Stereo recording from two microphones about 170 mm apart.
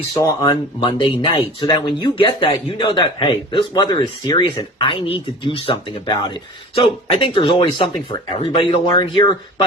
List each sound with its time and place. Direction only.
0.1 s speech: 25° left (ahead or behind)